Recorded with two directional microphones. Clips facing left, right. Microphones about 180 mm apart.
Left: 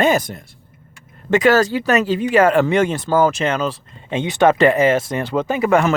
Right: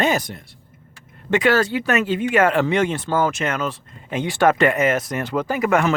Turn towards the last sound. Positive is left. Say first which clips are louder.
# left 3 dB
turn(degrees=30)  # may be behind; listen again after turning